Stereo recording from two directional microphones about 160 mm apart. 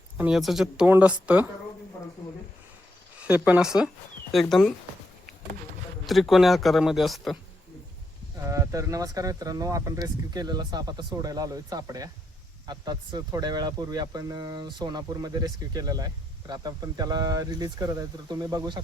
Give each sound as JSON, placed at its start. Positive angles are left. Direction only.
{"t": 0.2, "sound": "speech", "side_deg": -5}
{"t": 3.2, "sound": "speech", "side_deg": -10}
{"t": 6.1, "sound": "speech", "side_deg": 0}
{"t": 8.4, "sound": "speech", "side_deg": -20}